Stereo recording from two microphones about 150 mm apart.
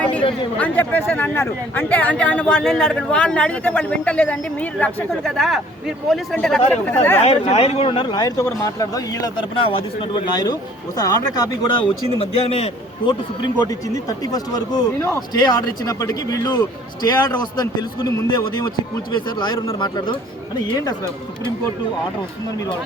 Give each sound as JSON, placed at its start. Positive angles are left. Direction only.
{"t": 0.6, "sound": "speech", "side_deg": 10}
{"t": 7.2, "sound": "speech", "side_deg": 45}
{"t": 13.6, "sound": "a man's voice", "side_deg": 25}